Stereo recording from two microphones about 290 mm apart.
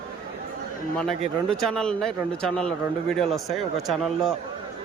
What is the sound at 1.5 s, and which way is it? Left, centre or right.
Speech, centre.